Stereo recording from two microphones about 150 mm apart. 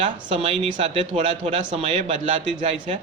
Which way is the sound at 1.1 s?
45° right (ahead or behind).